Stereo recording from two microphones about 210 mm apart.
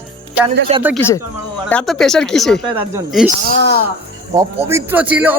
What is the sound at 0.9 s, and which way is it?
Speech, 10° left (ahead or behind).